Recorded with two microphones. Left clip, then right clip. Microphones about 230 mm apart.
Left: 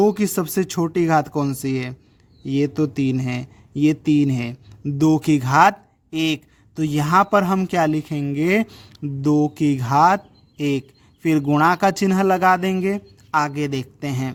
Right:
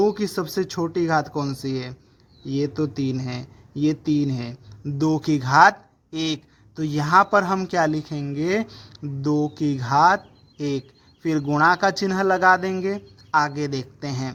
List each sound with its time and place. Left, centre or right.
0.0 s speech: left
11.2 s speech: left